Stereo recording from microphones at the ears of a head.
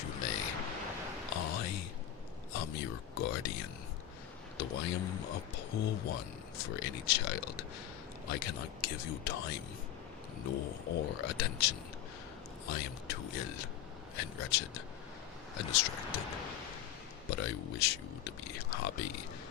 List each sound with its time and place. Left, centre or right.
0.0 s a sound: left
4.5 s speech: left
17.2 s speech: left